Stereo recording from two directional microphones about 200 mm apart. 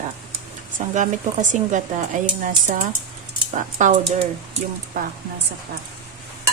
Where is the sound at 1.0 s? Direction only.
40° right (ahead or behind).